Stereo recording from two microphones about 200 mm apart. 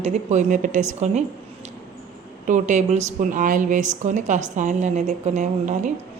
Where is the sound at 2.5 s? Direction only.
35° right (ahead or behind).